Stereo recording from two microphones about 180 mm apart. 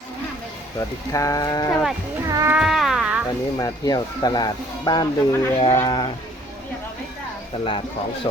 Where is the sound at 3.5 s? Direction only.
20° left (ahead or behind).